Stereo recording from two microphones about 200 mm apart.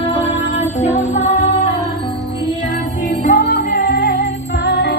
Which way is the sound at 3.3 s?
50° left (ahead or behind).